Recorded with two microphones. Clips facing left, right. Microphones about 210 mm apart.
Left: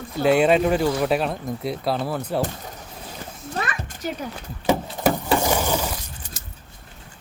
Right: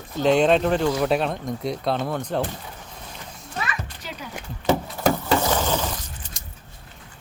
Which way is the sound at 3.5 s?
45° left (ahead or behind).